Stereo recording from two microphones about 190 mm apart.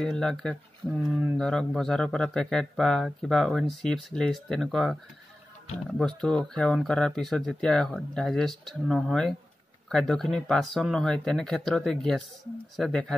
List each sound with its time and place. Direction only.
0.0 s speech: centre (ahead or behind)
5.9 s speech: 5° left (ahead or behind)